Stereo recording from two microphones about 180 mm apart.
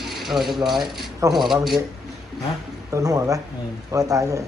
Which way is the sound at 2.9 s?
20° right (ahead or behind).